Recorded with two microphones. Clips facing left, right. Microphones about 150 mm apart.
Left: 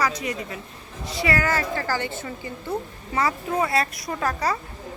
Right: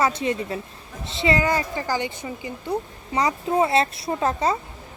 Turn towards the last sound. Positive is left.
turn(degrees=-20)  # may be behind; listen again after turning